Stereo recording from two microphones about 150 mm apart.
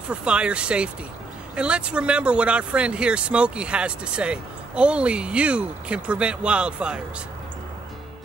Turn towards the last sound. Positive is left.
turn(degrees=-5)  # may be behind; listen again after turning